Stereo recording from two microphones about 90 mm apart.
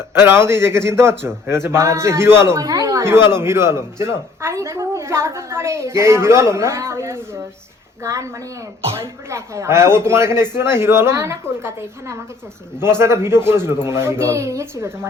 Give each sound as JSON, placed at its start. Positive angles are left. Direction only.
{"t": 0.1, "sound": "speech", "side_deg": -25}
{"t": 2.6, "sound": "speech", "side_deg": -40}